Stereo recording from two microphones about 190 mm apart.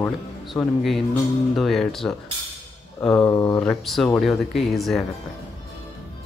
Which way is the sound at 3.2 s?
15° left (ahead or behind).